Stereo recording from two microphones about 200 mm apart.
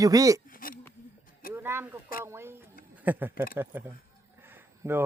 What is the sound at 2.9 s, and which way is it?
Speech, 10° right (ahead or behind).